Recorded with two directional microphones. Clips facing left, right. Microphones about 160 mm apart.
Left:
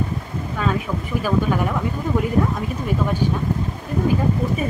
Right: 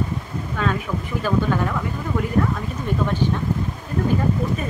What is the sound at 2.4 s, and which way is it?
Speech, 15° left (ahead or behind).